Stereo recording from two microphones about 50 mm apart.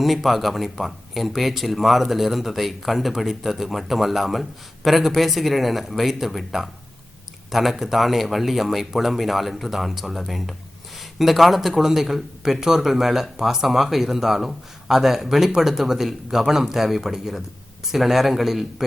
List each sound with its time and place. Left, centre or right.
0.0 s speech: centre